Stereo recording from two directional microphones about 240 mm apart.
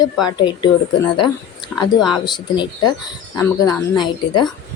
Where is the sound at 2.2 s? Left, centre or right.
Centre.